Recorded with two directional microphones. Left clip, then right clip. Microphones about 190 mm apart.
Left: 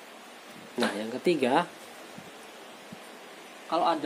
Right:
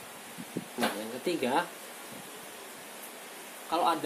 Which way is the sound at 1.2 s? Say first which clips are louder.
Left 5 dB; 45° left (ahead or behind).